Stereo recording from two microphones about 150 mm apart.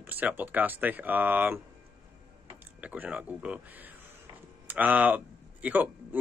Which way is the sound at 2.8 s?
10° right (ahead or behind).